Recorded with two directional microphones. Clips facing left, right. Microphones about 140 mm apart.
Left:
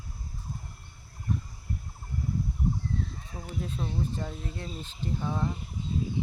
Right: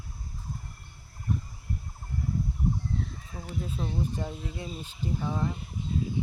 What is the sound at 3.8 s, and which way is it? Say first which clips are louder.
Speech: right 2 dB; 10° right (ahead or behind).